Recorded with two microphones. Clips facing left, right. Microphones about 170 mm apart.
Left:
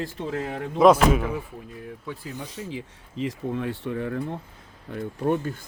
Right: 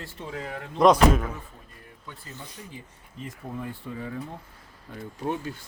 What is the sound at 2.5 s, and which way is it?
Speech, 90° left.